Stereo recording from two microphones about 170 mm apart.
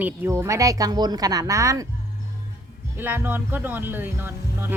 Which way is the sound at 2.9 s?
10° right (ahead or behind).